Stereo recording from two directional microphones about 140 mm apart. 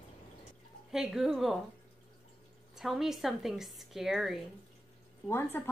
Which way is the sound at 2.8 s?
Centre (ahead or behind).